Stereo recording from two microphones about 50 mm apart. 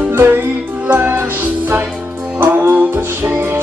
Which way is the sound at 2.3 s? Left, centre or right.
Right.